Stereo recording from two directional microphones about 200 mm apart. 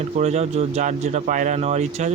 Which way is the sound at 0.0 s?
35° right (ahead or behind).